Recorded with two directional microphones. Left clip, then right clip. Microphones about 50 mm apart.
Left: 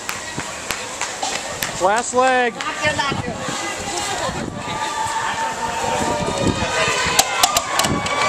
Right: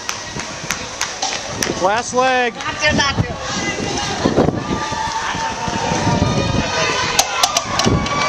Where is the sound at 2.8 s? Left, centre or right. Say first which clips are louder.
Right 4 dB; right.